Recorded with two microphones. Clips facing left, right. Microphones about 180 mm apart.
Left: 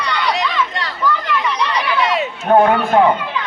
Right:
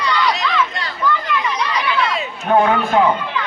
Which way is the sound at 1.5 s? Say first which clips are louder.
Left 1 dB; 65° left (ahead or behind).